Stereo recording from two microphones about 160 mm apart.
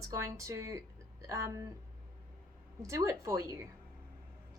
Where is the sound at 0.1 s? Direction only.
20° right (ahead or behind).